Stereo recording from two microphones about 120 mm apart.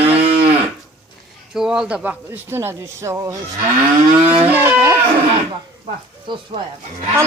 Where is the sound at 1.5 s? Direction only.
5° right (ahead or behind); by 3.3 s 25° right (ahead or behind).